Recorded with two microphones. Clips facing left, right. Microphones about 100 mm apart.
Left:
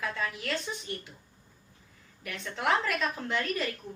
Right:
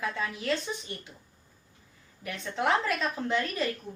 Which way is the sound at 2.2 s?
25° right (ahead or behind).